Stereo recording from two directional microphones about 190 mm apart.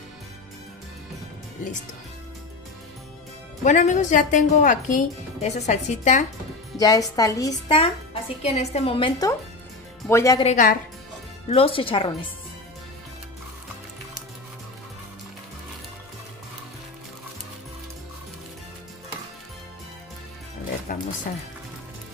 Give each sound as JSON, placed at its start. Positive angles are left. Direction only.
{"t": 3.6, "sound": "a woman's voice", "side_deg": 40}
{"t": 6.8, "sound": "a woman's voice", "side_deg": 20}
{"t": 7.6, "sound": "a woman's voice", "side_deg": 30}
{"t": 10.0, "sound": "a woman's voice", "side_deg": 15}
{"t": 10.4, "sound": "a woman's voice", "side_deg": 40}
{"t": 11.4, "sound": "speech", "side_deg": 30}
{"t": 20.9, "sound": "music", "side_deg": 45}